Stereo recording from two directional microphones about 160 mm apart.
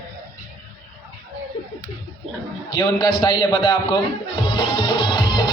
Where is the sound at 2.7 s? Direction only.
25° left (ahead or behind).